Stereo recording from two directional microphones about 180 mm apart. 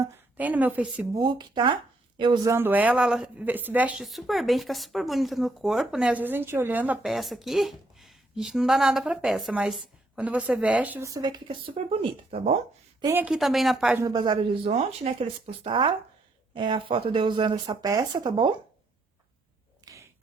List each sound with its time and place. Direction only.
0.3 s speech: 10° right (ahead or behind)
1.1 s speech: 25° right (ahead or behind)
13.0 s a woman's voice: 15° right (ahead or behind)
14.0 s speech: 25° right (ahead or behind)
19.8 s whip: 15° right (ahead or behind)